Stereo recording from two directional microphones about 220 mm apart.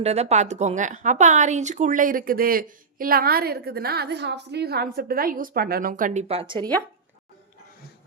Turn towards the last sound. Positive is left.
turn(degrees=-20)  # may be behind; listen again after turning